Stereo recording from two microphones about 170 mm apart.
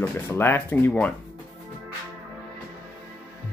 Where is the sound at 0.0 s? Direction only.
10° left (ahead or behind).